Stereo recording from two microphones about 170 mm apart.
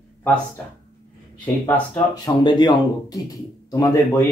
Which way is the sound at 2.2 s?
25° left (ahead or behind).